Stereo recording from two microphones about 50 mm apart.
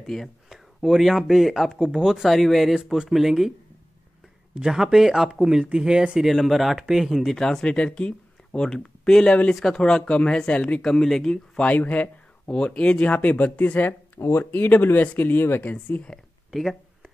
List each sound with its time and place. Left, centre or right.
0.0 s speech: centre
0.5 s speech: centre
1.8 s speech: centre
2.2 s speech: centre
2.7 s speech: centre
4.6 s speech: centre
6.2 s speech: centre
7.3 s speech: centre
10.8 s speech: centre
11.5 s speech: left
15.6 s speech: left
16.4 s a sound: centre